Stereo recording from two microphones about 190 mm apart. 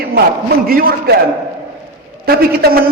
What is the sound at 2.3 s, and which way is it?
Speech, 55° right (ahead or behind).